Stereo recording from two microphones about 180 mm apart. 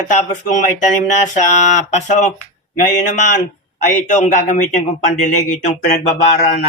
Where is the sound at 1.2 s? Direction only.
40° left (ahead or behind).